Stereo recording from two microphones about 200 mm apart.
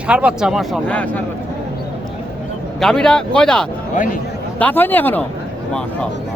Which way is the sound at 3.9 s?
40° left (ahead or behind).